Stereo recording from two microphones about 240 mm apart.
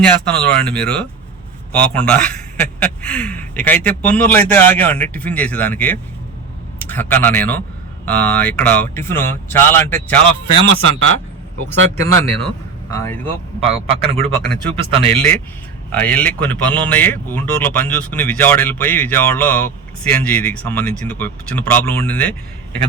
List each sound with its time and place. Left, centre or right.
0.0 s speech: centre
10.7 s speech: right
11.7 s speech: right
12.9 s speech: centre
13.7 s a man's voice: right
15.1 s speech: centre